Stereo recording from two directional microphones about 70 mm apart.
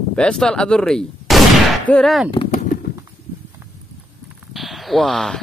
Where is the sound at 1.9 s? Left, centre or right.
Left.